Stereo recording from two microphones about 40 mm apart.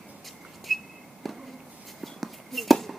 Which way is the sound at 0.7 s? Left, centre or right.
Centre.